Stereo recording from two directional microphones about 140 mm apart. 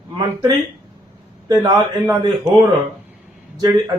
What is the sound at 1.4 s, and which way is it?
A man's voice, 30° right (ahead or behind).